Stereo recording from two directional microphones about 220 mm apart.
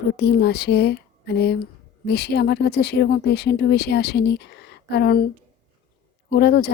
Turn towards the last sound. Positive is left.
turn(degrees=45)  # may be behind; listen again after turning